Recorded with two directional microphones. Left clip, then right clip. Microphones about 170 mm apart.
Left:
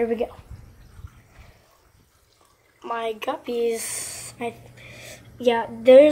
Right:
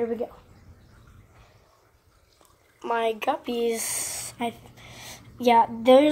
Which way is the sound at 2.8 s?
45° right (ahead or behind).